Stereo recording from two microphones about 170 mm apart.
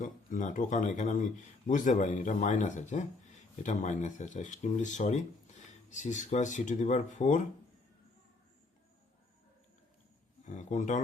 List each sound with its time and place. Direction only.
0.0 s speech: 50° left (ahead or behind)
10.4 s speech: 45° left (ahead or behind)